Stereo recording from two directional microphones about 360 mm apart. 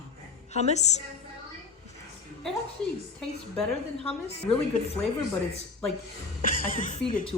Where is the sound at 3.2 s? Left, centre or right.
Centre.